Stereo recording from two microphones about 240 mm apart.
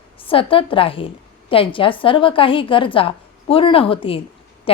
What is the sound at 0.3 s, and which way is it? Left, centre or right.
A woman's voice, left.